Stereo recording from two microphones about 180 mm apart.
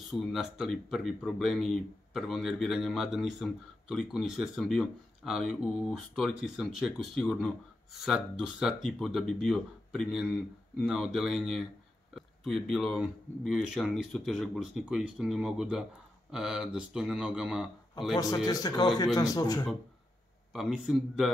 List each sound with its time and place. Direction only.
0.1 s speech: centre (ahead or behind)
18.1 s speech: 20° left (ahead or behind)
20.5 s speech: centre (ahead or behind)